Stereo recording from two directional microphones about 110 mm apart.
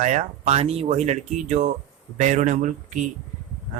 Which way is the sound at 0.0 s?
90° right.